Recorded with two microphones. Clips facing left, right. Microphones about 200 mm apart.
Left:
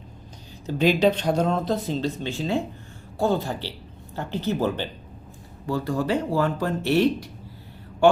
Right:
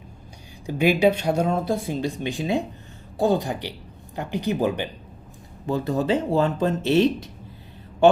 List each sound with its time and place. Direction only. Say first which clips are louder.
0.7 s speech: right 1 dB; 10° right (ahead or behind)